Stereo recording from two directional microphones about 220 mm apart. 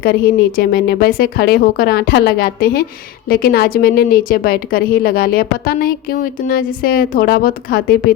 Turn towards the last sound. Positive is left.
turn(degrees=45)  # may be behind; listen again after turning